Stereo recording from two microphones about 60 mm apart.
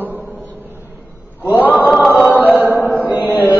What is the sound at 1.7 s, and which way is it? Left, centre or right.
Choir, left.